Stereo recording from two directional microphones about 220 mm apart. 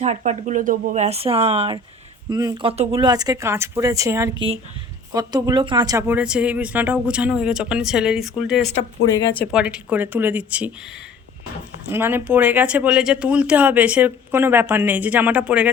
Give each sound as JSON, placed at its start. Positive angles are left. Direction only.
{"t": 0.0, "sound": "speech", "side_deg": -30}
{"t": 11.9, "sound": "speech", "side_deg": -10}